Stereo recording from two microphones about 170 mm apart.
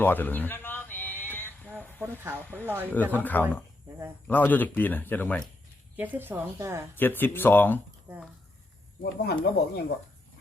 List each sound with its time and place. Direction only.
0.0 s a sound: 10° left (ahead or behind)
2.0 s speech: 15° right (ahead or behind)
2.4 s speech: 10° left (ahead or behind)
2.6 s speech: 10° right (ahead or behind)
2.9 s speech: 10° left (ahead or behind)
6.0 s speech: 10° right (ahead or behind)
6.9 s speech: 10° left (ahead or behind)
8.1 s speech: 15° right (ahead or behind)
9.0 s speech: 65° left (ahead or behind)